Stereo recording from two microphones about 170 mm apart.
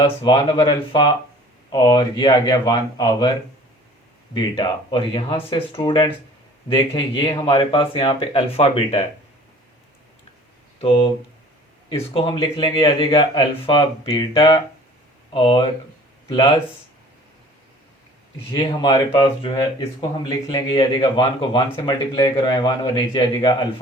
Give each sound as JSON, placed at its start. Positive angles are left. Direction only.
{"t": 0.3, "sound": "speech", "side_deg": 25}
{"t": 4.4, "sound": "speech", "side_deg": 25}
{"t": 10.8, "sound": "speech", "side_deg": 30}
{"t": 18.5, "sound": "speech", "side_deg": 25}